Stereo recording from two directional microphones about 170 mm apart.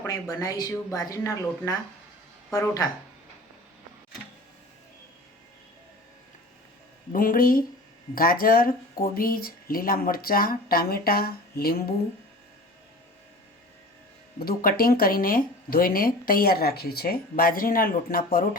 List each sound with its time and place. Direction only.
0.0 s speech: 20° left (ahead or behind)
7.1 s speech: 55° left (ahead or behind)
14.3 s speech: 60° left (ahead or behind)